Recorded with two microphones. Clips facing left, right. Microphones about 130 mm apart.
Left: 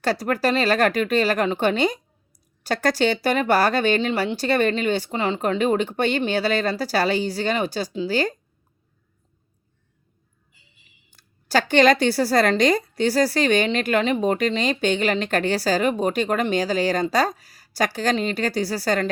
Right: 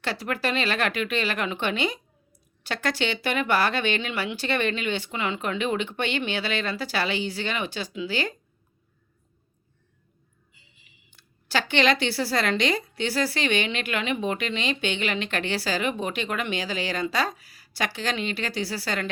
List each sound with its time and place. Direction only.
0.0 s speech: 40° left (ahead or behind)
11.1 s speech: 40° left (ahead or behind)